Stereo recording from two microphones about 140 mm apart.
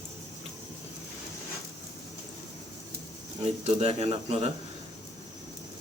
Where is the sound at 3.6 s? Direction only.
50° right (ahead or behind).